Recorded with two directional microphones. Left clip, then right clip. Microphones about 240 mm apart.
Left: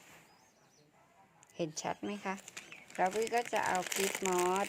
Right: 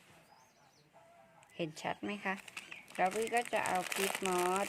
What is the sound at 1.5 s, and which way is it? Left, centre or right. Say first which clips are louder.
Speech: left 1 dB; centre.